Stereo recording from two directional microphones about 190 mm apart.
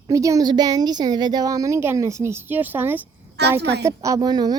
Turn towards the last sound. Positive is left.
turn(degrees=-20)  # may be behind; listen again after turning